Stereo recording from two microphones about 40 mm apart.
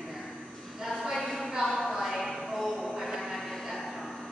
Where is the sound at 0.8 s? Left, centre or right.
Centre.